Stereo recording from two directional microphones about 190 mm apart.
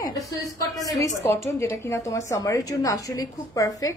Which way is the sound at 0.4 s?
20° left (ahead or behind).